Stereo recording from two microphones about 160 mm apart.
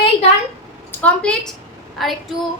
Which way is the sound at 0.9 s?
10° left (ahead or behind).